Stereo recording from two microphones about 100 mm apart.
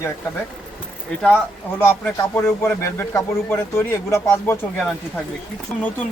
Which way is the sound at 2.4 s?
25° left (ahead or behind).